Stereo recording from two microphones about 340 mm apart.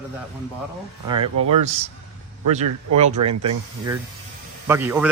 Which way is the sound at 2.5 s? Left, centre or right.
Centre.